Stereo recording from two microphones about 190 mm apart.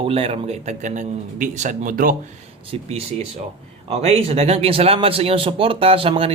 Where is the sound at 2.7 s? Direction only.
30° right (ahead or behind).